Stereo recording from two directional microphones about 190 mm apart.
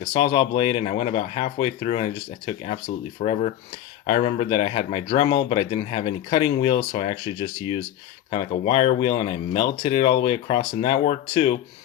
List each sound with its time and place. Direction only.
0.1 s speech: 25° left (ahead or behind)